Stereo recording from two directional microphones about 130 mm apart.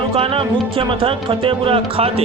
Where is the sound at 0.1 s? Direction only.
45° right (ahead or behind).